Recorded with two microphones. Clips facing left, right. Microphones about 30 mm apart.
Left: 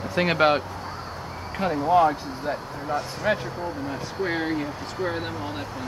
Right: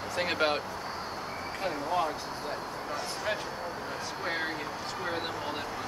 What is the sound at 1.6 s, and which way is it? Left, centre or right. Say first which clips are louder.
Speech: left 11 dB; left.